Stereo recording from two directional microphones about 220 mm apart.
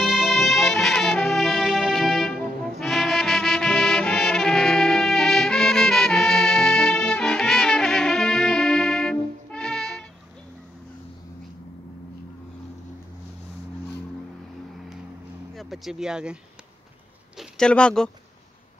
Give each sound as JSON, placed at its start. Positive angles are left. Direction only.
{"t": 0.0, "sound": "brass instrument", "side_deg": 0}
{"t": 15.5, "sound": "a sound", "side_deg": 0}
{"t": 17.4, "sound": "speech", "side_deg": 5}